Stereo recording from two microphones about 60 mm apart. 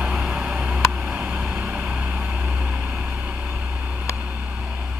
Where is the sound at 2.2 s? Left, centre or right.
Right.